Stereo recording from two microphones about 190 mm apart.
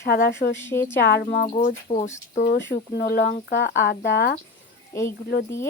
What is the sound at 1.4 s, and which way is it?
Speech, 40° left (ahead or behind).